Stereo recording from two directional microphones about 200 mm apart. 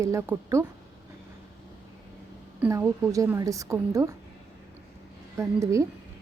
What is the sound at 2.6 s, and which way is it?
Speech, 10° right (ahead or behind).